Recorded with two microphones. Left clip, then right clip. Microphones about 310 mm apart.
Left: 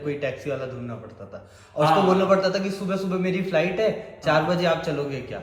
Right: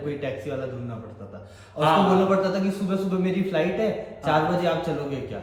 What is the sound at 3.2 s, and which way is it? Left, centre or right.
Speech, left.